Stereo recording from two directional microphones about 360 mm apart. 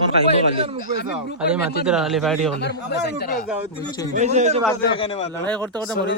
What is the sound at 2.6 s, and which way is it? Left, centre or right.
Speech, left.